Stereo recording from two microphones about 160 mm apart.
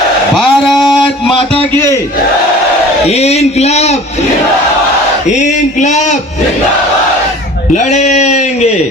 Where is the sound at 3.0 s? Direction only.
40° left (ahead or behind).